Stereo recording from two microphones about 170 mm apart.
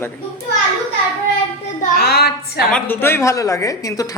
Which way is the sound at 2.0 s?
70° left (ahead or behind).